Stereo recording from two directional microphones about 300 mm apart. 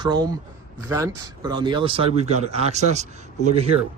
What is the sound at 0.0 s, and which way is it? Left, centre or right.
Speech, centre.